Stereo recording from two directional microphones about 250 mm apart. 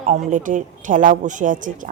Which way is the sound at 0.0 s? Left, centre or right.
Right.